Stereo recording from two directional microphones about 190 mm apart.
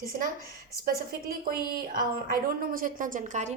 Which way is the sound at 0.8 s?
50° right (ahead or behind).